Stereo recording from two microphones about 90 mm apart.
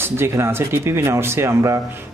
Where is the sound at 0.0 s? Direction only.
30° right (ahead or behind).